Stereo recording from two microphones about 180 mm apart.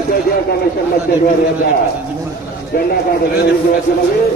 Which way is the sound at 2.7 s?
55° left (ahead or behind).